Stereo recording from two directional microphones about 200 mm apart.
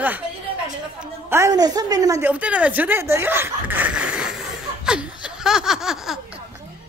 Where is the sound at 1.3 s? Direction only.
15° right (ahead or behind).